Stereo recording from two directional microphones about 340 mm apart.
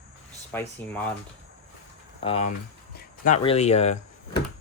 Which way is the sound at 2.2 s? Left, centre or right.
Centre.